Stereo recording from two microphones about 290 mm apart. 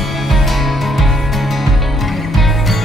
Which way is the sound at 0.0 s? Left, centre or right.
Centre.